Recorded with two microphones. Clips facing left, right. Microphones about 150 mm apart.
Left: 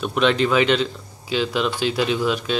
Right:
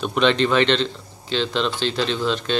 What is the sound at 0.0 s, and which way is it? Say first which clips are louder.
Speech: even; centre (ahead or behind).